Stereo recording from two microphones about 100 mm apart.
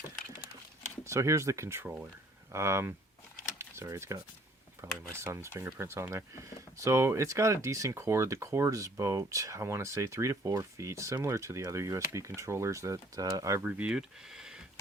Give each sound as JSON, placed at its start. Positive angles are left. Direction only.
{"t": 1.0, "sound": "speech", "side_deg": -30}
{"t": 13.6, "sound": "speech", "side_deg": -15}